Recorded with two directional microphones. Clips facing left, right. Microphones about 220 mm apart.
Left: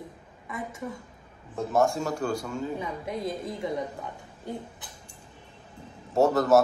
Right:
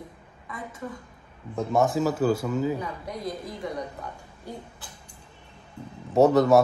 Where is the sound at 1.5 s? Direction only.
Centre (ahead or behind).